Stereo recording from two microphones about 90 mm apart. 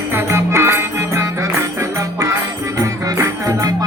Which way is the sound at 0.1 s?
30° right (ahead or behind).